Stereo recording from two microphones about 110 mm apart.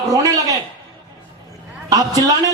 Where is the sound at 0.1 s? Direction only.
35° right (ahead or behind).